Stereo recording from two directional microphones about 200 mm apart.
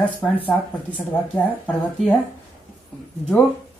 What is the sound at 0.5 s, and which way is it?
Speech, 5° left (ahead or behind).